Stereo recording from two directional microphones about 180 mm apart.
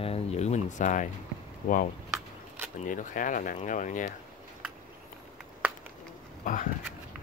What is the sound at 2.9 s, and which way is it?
Speech, 45° left (ahead or behind).